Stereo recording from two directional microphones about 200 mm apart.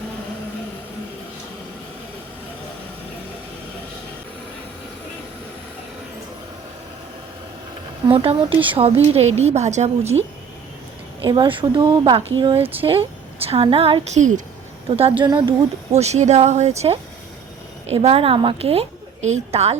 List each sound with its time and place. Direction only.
8.0 s a woman's voice: 25° right (ahead or behind)
11.2 s a woman's voice: 25° right (ahead or behind)